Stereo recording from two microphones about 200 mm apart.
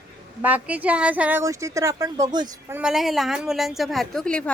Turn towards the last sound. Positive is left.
turn(degrees=5)  # may be behind; listen again after turning